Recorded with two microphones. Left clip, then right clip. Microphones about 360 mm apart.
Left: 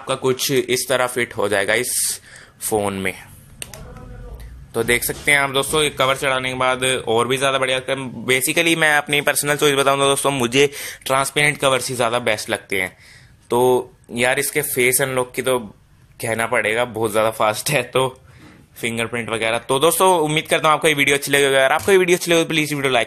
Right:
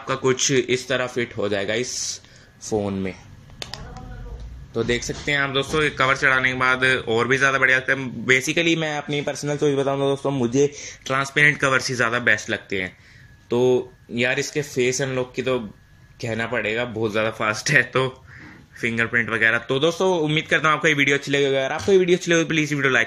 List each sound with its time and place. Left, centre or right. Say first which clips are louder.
0.0 s speech: left 1 dB; centre
4.7 s speech: left 4 dB; centre